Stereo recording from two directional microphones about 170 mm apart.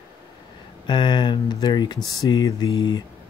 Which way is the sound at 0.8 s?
25° left (ahead or behind).